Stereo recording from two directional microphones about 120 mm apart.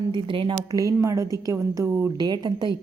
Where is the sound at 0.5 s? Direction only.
30° right (ahead or behind).